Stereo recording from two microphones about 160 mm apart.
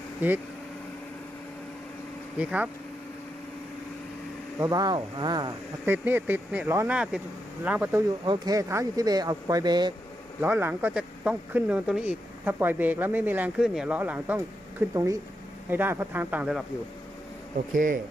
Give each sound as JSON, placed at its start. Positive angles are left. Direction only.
{"t": 2.4, "sound": "speech", "side_deg": -5}
{"t": 4.6, "sound": "speech", "side_deg": -25}
{"t": 5.8, "sound": "speech", "side_deg": -10}
{"t": 8.2, "sound": "speech", "side_deg": -25}
{"t": 10.4, "sound": "speech", "side_deg": -10}
{"t": 17.7, "sound": "speech", "side_deg": -55}